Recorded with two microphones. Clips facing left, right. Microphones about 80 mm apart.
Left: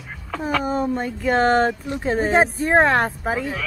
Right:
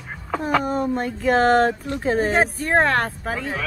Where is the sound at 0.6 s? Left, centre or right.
Centre.